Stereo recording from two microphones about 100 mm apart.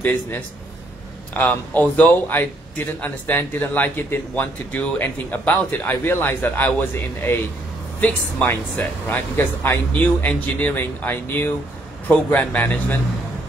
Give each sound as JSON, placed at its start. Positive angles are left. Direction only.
{"t": 0.0, "sound": "a man's voice", "side_deg": 15}